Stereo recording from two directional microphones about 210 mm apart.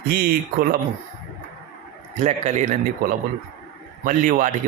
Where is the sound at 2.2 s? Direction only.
30° right (ahead or behind).